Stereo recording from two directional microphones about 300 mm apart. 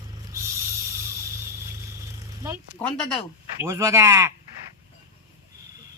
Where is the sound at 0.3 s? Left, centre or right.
Centre.